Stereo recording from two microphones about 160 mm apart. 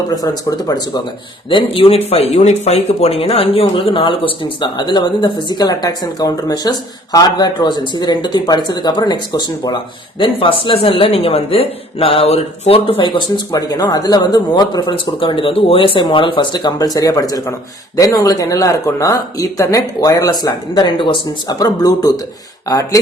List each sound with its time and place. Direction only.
0.1 s speech: 25° left (ahead or behind)
1.7 s speech: 35° left (ahead or behind)